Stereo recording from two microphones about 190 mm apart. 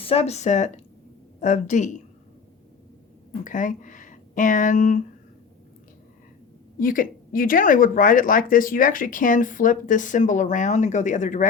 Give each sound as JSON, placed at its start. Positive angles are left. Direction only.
{"t": 0.0, "sound": "speech", "side_deg": 35}
{"t": 3.4, "sound": "speech", "side_deg": 45}
{"t": 6.7, "sound": "speech", "side_deg": 45}